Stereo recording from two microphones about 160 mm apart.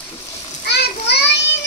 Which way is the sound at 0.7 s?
90° left.